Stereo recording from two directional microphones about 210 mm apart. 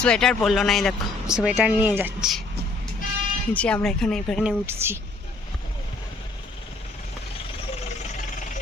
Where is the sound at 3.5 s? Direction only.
5° left (ahead or behind).